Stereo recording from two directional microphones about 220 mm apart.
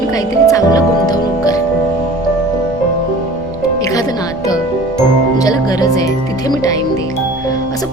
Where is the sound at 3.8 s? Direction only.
15° left (ahead or behind).